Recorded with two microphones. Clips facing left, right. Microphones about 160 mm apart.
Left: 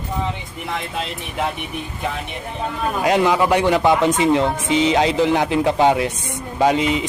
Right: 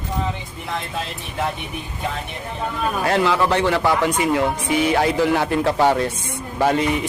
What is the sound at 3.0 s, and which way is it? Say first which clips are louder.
A man's voice: left 3 dB; 15° left (ahead or behind).